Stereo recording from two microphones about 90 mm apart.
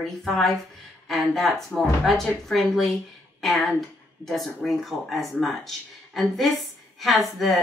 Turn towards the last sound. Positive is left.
turn(degrees=0)  # may be behind; listen again after turning